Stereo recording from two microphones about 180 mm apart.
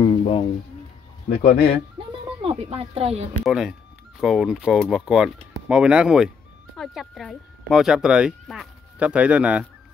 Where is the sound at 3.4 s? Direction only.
5° right (ahead or behind).